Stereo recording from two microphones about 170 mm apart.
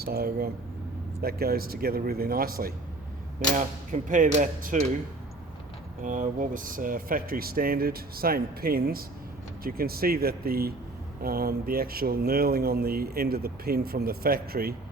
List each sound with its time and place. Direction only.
0.0 s speech: 65° right (ahead or behind)
3.5 s speech: 50° right (ahead or behind)
6.0 s speech: 50° right (ahead or behind)